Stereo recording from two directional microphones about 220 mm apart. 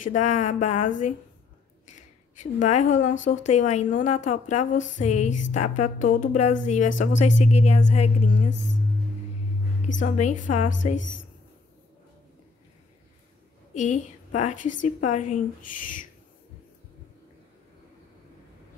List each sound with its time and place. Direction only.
0.0 s a woman's voice: 35° left (ahead or behind)
0.7 s a woman's voice: 90° left
1.9 s a woman's voice: 35° left (ahead or behind)
9.9 s a woman's voice: 35° left (ahead or behind)
10.5 s a woman's voice: 90° left
13.7 s a woman's voice: 35° left (ahead or behind)